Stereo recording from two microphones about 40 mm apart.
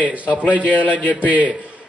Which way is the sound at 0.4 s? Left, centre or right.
Left.